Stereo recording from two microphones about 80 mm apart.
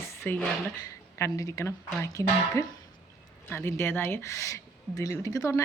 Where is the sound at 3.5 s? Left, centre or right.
Left.